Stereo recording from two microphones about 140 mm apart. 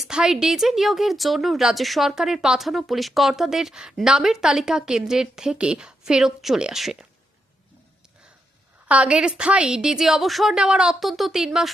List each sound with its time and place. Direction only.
0.0 s a woman's voice: 5° right (ahead or behind)
8.9 s a woman's voice: 10° right (ahead or behind)